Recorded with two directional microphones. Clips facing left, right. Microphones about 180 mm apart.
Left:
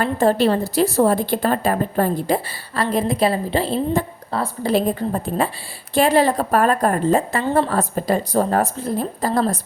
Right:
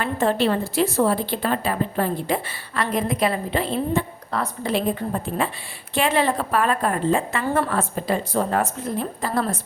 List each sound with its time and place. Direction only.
0.0 s a woman's voice: 40° left (ahead or behind)